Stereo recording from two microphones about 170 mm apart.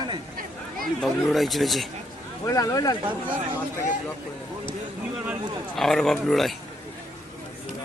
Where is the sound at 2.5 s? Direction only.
20° left (ahead or behind).